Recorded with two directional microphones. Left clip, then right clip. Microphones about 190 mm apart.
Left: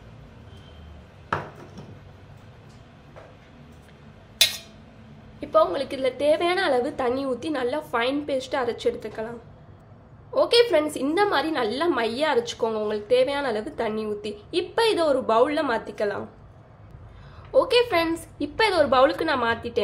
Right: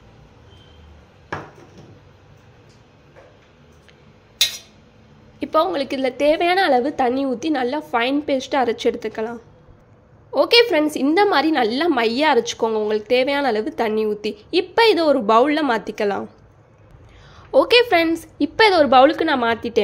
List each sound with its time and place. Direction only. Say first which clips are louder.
5.4 s a woman's voice: right 2 dB; 45° right (ahead or behind)
10.3 s a woman's voice: right 4 dB; 40° right (ahead or behind)
17.5 s a woman's voice: right 6 dB; 45° right (ahead or behind)